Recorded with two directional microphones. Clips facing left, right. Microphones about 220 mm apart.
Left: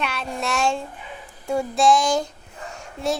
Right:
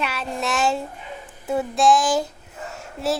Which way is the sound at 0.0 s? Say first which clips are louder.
Right 1 dB; 5° right (ahead or behind).